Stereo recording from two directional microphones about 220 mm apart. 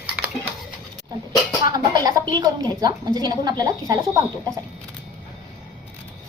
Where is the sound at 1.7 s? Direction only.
15° right (ahead or behind).